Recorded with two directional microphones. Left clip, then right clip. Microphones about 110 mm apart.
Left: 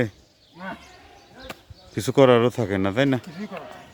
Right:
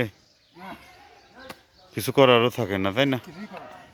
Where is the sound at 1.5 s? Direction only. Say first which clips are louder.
Left 4 dB; 25° right (ahead or behind).